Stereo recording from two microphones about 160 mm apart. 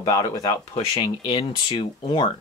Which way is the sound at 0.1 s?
20° left (ahead or behind).